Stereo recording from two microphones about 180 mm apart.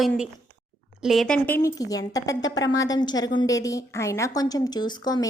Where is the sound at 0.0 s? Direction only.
Centre (ahead or behind).